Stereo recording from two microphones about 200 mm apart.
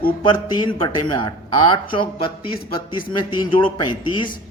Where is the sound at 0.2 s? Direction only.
25° left (ahead or behind).